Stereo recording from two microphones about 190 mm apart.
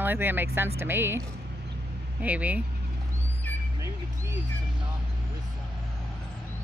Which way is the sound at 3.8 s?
15° right (ahead or behind).